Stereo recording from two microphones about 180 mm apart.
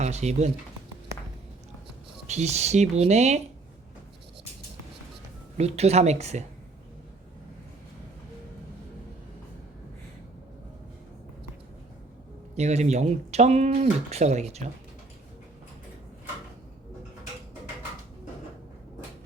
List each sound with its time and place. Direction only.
0.0 s speech: 40° right (ahead or behind)
2.2 s speech: 40° right (ahead or behind)
5.5 s speech: 35° right (ahead or behind)
12.5 s speech: 40° right (ahead or behind)